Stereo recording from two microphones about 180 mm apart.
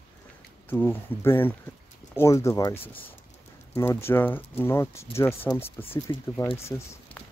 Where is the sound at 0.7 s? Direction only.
10° left (ahead or behind).